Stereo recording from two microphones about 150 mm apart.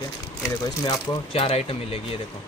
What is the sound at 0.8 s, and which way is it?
Speech, 35° left (ahead or behind).